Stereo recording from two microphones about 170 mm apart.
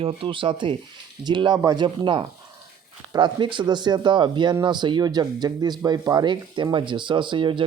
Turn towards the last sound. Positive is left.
turn(degrees=-30)  # may be behind; listen again after turning